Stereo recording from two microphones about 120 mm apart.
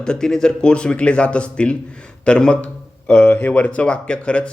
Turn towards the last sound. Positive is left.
turn(degrees=10)  # may be behind; listen again after turning